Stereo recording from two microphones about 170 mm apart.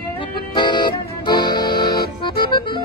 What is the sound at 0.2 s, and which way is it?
Music, 25° left (ahead or behind).